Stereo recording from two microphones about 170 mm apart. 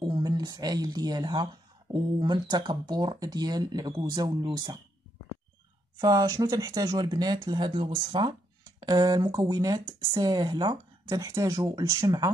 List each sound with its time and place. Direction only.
0.0 s speech: 25° right (ahead or behind)
5.9 s speech: 20° right (ahead or behind)